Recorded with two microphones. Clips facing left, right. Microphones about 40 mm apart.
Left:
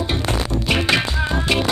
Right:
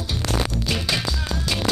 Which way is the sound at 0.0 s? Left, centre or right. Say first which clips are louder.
Left 3 dB; left.